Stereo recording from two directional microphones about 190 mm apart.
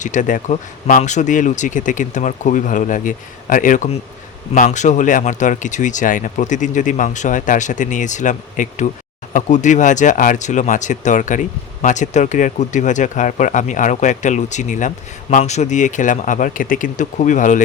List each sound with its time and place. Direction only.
0.0 s speech: 40° left (ahead or behind)